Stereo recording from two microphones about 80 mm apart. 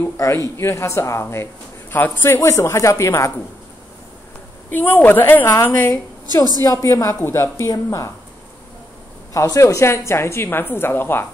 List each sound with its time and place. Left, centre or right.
0.6 s a woman's voice: left
2.3 s a woman's voice: left
4.6 s a woman's voice: left
6.2 s a woman's voice: right
6.6 s speech: left
7.2 s a woman's voice: left
9.3 s a woman's voice: left